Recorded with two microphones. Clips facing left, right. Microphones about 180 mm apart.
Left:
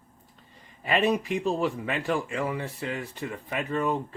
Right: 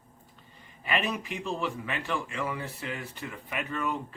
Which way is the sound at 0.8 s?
35° left (ahead or behind).